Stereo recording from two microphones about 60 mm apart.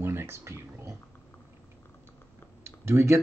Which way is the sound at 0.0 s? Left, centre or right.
Right.